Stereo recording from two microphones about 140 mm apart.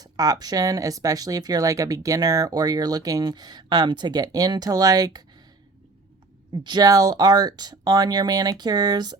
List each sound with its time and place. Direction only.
0.0 s speech: 25° right (ahead or behind)
6.5 s speech: 30° right (ahead or behind)